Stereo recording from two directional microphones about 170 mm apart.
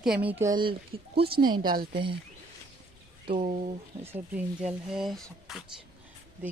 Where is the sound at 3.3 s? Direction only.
40° right (ahead or behind).